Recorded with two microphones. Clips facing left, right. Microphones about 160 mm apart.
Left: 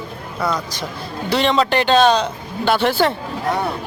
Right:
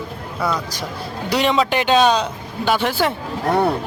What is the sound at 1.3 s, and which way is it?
Speech, 5° right (ahead or behind).